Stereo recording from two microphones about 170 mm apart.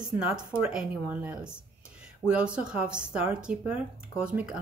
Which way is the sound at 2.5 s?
5° right (ahead or behind).